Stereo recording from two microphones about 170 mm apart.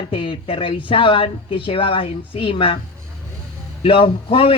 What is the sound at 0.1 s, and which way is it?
Speech, 30° left (ahead or behind).